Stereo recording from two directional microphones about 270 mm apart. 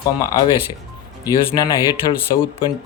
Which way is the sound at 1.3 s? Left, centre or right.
Centre.